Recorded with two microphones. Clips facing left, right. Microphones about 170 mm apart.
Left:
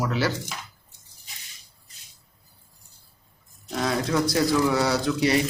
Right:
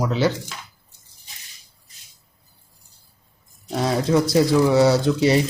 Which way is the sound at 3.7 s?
30° right (ahead or behind).